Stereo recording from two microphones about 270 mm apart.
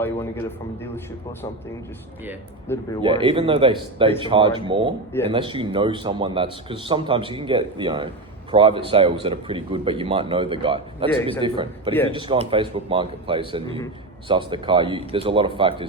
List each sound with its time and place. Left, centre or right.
0.0 s speech: centre
3.0 s a man's voice: centre